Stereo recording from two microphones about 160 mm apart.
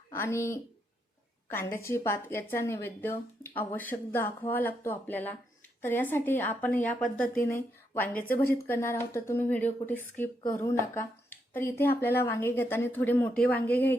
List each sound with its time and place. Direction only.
0.1 s a woman's voice: 15° left (ahead or behind)
7.0 s speech: 60° left (ahead or behind)
7.4 s a woman's voice: 10° left (ahead or behind)